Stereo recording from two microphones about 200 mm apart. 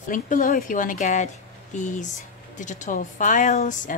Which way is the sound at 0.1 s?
40° left (ahead or behind).